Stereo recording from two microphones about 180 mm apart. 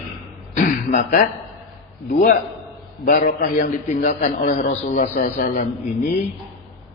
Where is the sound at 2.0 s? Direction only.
50° left (ahead or behind).